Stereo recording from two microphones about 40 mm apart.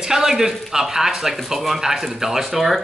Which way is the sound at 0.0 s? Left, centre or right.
Centre.